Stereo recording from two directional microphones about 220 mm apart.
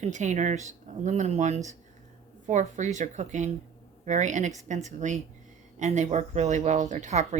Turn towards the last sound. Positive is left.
turn(degrees=-35)  # may be behind; listen again after turning